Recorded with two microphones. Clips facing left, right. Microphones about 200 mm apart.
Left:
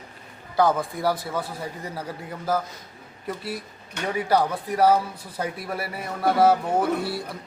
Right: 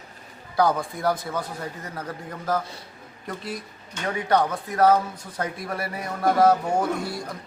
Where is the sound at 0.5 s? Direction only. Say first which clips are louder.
Left 1 dB; centre (ahead or behind).